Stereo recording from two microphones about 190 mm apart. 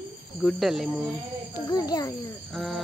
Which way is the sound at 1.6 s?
20° left (ahead or behind).